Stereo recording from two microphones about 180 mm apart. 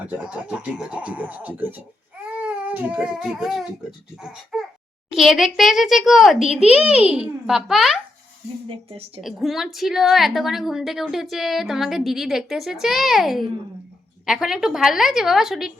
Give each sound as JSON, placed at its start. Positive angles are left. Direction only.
{"t": 0.1, "sound": "speech", "side_deg": -5}
{"t": 2.3, "sound": "a sound", "side_deg": -10}
{"t": 4.2, "sound": "a woman's voice", "side_deg": -5}
{"t": 8.6, "sound": "speech", "side_deg": -35}
{"t": 9.2, "sound": "a woman's voice", "side_deg": 0}